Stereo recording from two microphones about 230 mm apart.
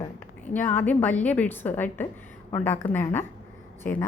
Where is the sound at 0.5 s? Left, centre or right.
Centre.